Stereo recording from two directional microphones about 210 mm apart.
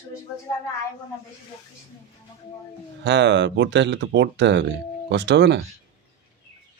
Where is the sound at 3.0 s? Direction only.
55° right (ahead or behind).